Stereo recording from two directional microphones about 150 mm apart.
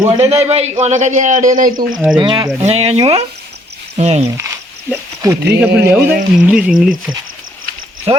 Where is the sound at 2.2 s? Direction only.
30° right (ahead or behind).